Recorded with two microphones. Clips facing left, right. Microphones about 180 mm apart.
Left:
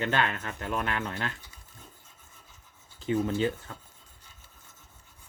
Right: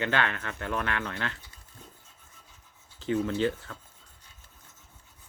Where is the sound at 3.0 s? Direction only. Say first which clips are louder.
Even; 10° left (ahead or behind).